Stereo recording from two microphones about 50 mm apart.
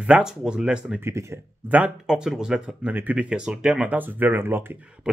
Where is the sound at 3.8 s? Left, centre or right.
Right.